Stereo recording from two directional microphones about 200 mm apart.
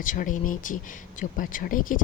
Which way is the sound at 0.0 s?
40° left (ahead or behind).